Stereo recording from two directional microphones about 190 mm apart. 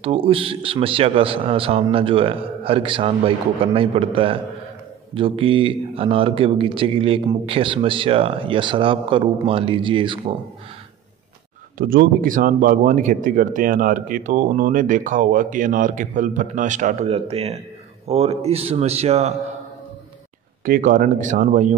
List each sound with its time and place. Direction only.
0.0 s speech: 30° right (ahead or behind)
11.8 s a man's voice: 50° right (ahead or behind); by 19.3 s 35° right (ahead or behind)
20.6 s speech: 45° right (ahead or behind)